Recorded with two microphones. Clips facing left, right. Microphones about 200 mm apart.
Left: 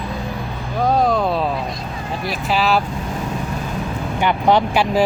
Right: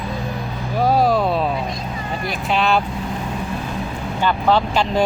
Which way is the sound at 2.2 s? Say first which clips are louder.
Left 1 dB; 5° left (ahead or behind).